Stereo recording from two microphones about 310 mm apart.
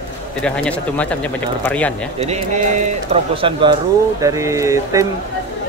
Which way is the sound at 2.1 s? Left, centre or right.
Right.